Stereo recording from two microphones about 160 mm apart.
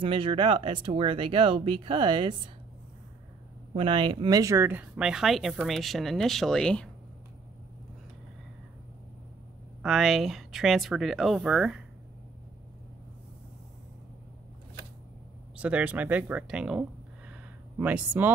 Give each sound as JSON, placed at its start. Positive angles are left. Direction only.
{"t": 0.0, "sound": "speech", "side_deg": -35}
{"t": 3.7, "sound": "speech", "side_deg": -30}
{"t": 9.8, "sound": "speech", "side_deg": 0}
{"t": 15.5, "sound": "speech", "side_deg": -10}
{"t": 17.3, "sound": "a sound", "side_deg": -10}